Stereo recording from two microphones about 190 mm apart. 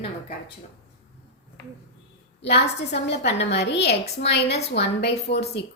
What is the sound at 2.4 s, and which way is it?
A woman's voice, 65° left (ahead or behind).